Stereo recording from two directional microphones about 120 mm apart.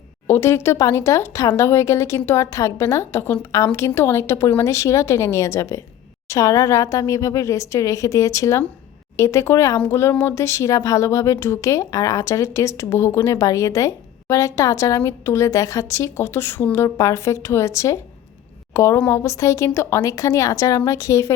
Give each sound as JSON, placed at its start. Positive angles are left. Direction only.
{"t": 0.3, "sound": "speech", "side_deg": 20}